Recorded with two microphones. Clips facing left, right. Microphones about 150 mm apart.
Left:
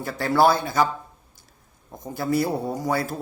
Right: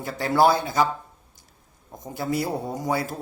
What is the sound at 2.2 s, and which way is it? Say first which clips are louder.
Speech: left 3 dB; 20° right (ahead or behind).